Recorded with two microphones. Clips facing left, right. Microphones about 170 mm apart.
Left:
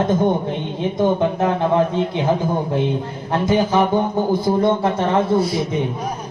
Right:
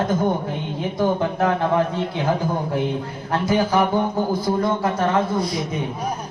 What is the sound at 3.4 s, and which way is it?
Speech, 20° left (ahead or behind).